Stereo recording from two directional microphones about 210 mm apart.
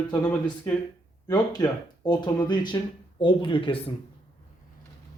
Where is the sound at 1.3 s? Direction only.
20° left (ahead or behind).